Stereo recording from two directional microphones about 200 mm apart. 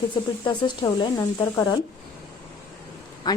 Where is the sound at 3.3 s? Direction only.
20° left (ahead or behind).